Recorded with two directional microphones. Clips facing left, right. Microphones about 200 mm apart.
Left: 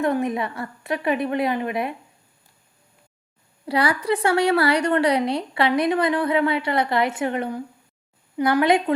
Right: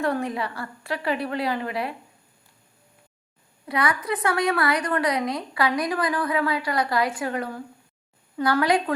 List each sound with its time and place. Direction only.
0.0 s a woman's voice: 20° left (ahead or behind)
3.7 s a woman's voice: 30° left (ahead or behind)